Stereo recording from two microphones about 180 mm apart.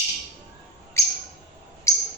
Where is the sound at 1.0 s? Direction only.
15° left (ahead or behind).